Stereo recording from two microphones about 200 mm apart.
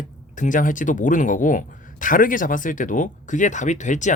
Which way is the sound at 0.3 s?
40° left (ahead or behind).